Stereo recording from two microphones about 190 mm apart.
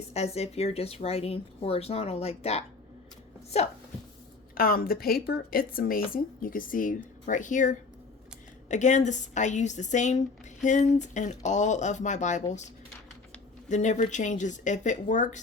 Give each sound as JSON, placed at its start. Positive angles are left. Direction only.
{"t": 0.1, "sound": "speech", "side_deg": 35}
{"t": 4.5, "sound": "speech", "side_deg": 50}
{"t": 13.7, "sound": "speech", "side_deg": 40}